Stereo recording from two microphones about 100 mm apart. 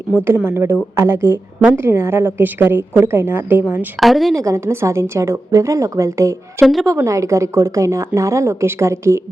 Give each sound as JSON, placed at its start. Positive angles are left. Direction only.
{"t": 0.3, "sound": "a woman's voice", "side_deg": -25}
{"t": 4.0, "sound": "speech", "side_deg": 0}
{"t": 4.4, "sound": "speech", "side_deg": -30}
{"t": 6.6, "sound": "speech", "side_deg": 0}
{"t": 6.8, "sound": "speech", "side_deg": -30}